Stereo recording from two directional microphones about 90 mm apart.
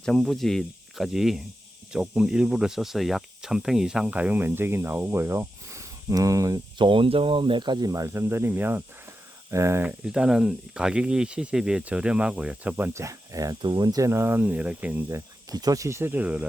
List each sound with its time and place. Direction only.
0.0 s speech: 5° left (ahead or behind); by 6.6 s 40° right (ahead or behind)
6.7 s speech: 75° right (ahead or behind); by 8.0 s 45° right (ahead or behind)
8.0 s speech: 30° right (ahead or behind)
10.0 s speech: 10° right (ahead or behind)
12.9 s speech: 35° right (ahead or behind)
13.6 s speech: 55° right (ahead or behind)
14.1 s speech: 25° right (ahead or behind)
15.4 s speech: 45° right (ahead or behind); by 16.5 s 15° right (ahead or behind)